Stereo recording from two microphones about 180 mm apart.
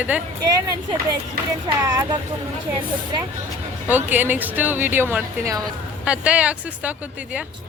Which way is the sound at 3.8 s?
10° right (ahead or behind).